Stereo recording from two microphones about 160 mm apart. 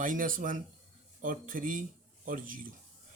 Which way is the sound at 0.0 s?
55° right (ahead or behind).